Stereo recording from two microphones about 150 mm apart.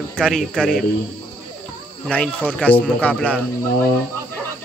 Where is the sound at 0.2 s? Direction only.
5° left (ahead or behind).